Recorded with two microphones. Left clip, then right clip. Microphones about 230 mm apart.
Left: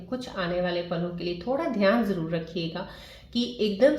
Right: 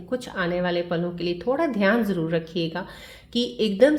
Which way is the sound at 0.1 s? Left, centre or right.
Right.